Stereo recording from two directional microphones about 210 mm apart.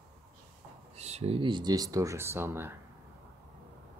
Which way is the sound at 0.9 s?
30° right (ahead or behind).